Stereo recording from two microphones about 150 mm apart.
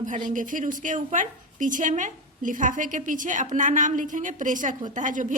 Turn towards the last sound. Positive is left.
turn(degrees=-55)  # may be behind; listen again after turning